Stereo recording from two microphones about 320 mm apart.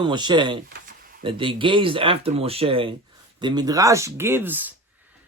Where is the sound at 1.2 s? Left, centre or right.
Centre.